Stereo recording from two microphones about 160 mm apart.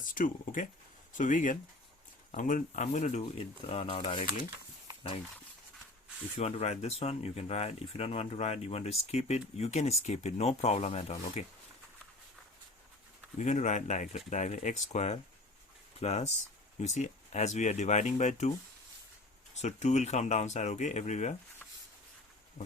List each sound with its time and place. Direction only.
0.0 s speech: 55° left (ahead or behind); by 4.3 s 35° left (ahead or behind)
6.3 s speech: 40° left (ahead or behind)
13.4 s speech: 50° left (ahead or behind)
19.6 s speech: 45° left (ahead or behind)